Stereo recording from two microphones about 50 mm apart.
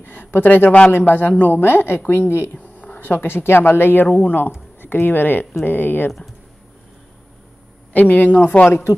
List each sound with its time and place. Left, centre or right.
0.0 s speech: left
2.5 s a woman's voice: left
7.9 s a woman's voice: left
8.6 s speech: left